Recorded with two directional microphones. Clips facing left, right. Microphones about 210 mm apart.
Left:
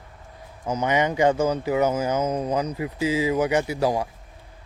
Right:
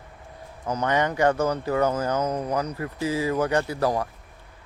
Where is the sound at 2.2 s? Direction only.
20° left (ahead or behind).